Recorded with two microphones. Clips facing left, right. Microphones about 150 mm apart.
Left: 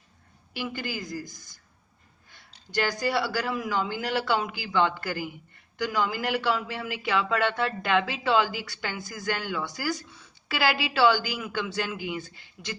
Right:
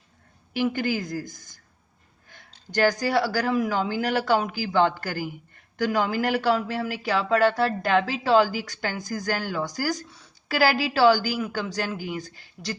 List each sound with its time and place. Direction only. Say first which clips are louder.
0.5 s a man's voice: right 8 dB; 50° right (ahead or behind)